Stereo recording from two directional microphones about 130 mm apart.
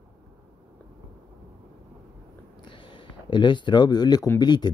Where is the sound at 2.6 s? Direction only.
40° left (ahead or behind).